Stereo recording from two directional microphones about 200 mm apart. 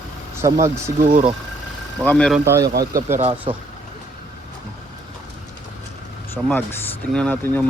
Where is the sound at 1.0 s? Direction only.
40° right (ahead or behind).